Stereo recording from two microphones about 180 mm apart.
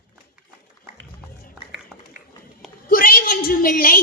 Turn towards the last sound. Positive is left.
turn(degrees=55)  # may be behind; listen again after turning